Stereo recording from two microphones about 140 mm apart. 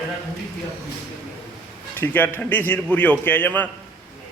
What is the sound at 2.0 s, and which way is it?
A man's voice, 15° left (ahead or behind).